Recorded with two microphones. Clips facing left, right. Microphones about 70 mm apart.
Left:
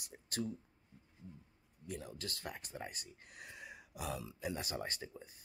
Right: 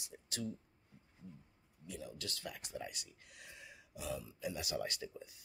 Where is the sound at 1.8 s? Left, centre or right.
Left.